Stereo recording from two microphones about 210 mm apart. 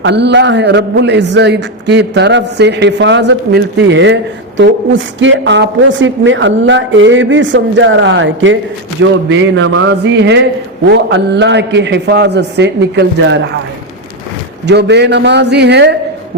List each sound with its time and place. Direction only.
0.0 s a man's voice: 55° right (ahead or behind)
14.7 s a man's voice: 55° right (ahead or behind)